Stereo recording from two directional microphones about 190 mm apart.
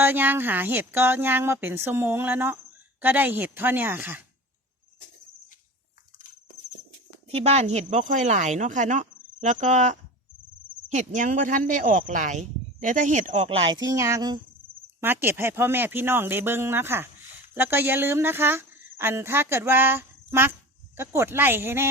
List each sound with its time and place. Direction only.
0.0 s speech: 10° right (ahead or behind)
7.3 s speech: 35° right (ahead or behind); by 21.8 s 10° right (ahead or behind)